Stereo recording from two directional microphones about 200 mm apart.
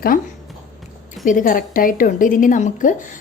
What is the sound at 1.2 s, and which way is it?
A woman's voice, 40° left (ahead or behind).